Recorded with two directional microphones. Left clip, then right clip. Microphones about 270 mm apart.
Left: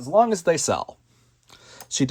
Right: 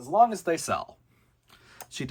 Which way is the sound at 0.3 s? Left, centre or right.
Centre.